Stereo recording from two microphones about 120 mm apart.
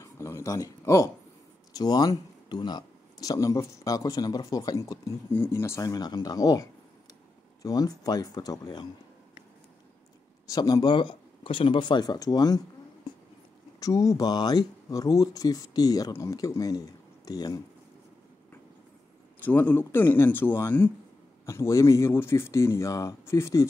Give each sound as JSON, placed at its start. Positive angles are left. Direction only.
{"t": 0.0, "sound": "speech", "side_deg": 25}
{"t": 10.5, "sound": "speech", "side_deg": 35}
{"t": 13.7, "sound": "speech", "side_deg": 30}
{"t": 19.4, "sound": "speech", "side_deg": 15}